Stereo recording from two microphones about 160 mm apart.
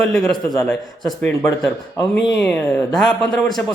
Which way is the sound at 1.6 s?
5° left (ahead or behind).